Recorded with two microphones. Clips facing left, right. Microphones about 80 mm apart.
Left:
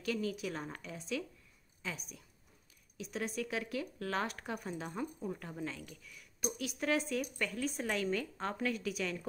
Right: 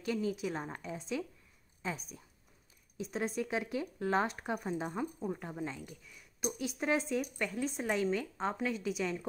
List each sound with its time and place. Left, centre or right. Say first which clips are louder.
0.0 s speech: right 2 dB; right